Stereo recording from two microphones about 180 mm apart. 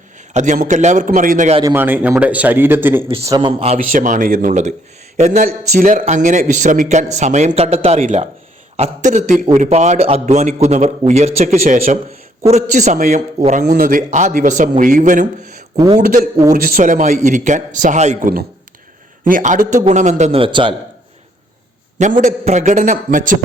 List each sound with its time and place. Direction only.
0.3 s a man's voice: 45° right (ahead or behind)
1.6 s speech: 10° right (ahead or behind)
3.2 s speech: 25° right (ahead or behind)
3.8 s a man's voice: 50° right (ahead or behind)
13.7 s a man's voice: 55° right (ahead or behind); by 20.7 s 25° right (ahead or behind)
22.2 s a man's voice: 40° right (ahead or behind)